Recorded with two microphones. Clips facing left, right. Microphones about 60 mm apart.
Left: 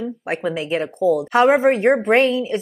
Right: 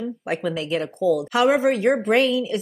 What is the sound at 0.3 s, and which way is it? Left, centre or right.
Speech, left.